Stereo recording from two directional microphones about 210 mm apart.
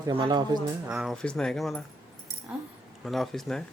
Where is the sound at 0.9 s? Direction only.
Centre (ahead or behind).